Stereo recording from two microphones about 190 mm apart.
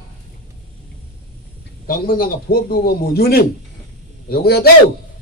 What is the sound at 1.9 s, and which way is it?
A man's voice, 50° left (ahead or behind).